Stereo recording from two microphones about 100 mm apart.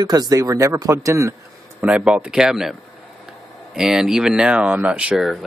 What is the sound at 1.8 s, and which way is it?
Speech, 10° right (ahead or behind).